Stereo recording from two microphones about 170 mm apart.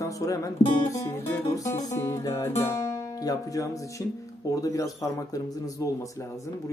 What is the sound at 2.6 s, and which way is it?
Speech, 15° left (ahead or behind).